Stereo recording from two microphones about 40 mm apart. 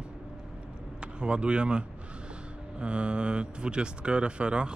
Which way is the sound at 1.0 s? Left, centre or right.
Right.